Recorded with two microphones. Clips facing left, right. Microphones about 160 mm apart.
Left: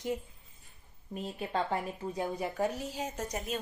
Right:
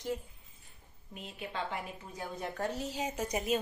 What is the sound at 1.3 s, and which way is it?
Speech, 40° left (ahead or behind).